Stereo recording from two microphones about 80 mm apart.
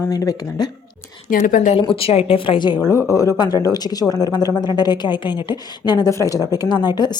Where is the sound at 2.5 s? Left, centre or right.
Left.